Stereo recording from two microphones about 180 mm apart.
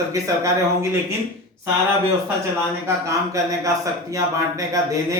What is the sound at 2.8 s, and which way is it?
Speech, 15° right (ahead or behind).